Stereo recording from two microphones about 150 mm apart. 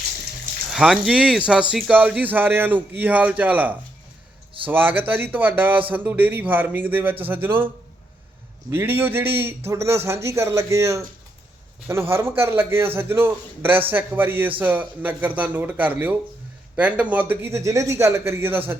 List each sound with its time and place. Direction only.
0.7 s speech: 5° right (ahead or behind)
8.7 s speech: 15° right (ahead or behind)